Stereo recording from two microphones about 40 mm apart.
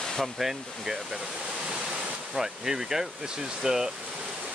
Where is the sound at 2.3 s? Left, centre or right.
Centre.